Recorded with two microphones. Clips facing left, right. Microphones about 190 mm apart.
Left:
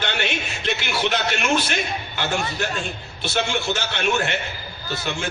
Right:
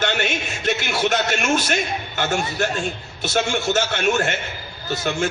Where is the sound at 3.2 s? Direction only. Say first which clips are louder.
Right 3 dB; 45° right (ahead or behind).